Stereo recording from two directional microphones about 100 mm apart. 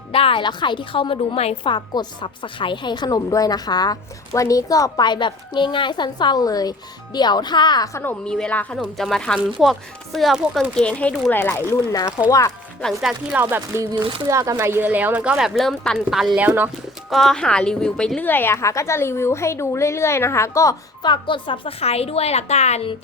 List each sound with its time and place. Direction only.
0.1 s a woman's voice: 65° left (ahead or behind); by 7.9 s 45° left (ahead or behind)
8.2 s a woman's voice: 10° left (ahead or behind); by 12.1 s 30° left (ahead or behind)
12.8 s speech: centre (ahead or behind)
13.3 s speech: 20° right (ahead or behind)
14.3 s speech: 30° right (ahead or behind)
14.6 s a woman's voice: 20° right (ahead or behind); by 16.4 s 5° right (ahead or behind)
16.4 s a woman's voice: 15° right (ahead or behind)
17.1 s speech: 5° left (ahead or behind)
18.3 s a woman's voice: 20° left (ahead or behind)
21.0 s a woman's voice: 50° left (ahead or behind); by 23.0 s 80° left